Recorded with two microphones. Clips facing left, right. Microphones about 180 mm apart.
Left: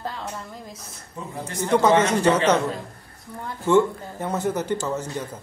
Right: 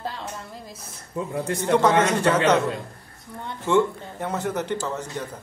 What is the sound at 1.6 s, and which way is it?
Speech, centre (ahead or behind).